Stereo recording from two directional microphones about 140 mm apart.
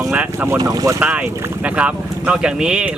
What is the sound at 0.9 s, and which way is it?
Speech, 15° right (ahead or behind).